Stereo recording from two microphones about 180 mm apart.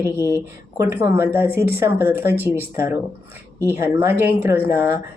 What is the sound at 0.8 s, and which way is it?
Speech, 15° right (ahead or behind).